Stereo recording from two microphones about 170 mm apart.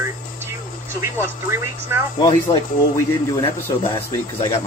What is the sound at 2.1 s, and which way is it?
Speech, 25° left (ahead or behind).